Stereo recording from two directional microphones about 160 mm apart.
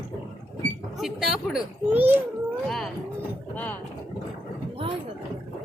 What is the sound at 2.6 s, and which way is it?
Speech, 5° left (ahead or behind).